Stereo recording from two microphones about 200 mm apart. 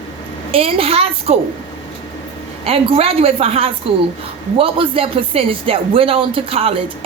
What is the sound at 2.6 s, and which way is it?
Speech, 30° right (ahead or behind).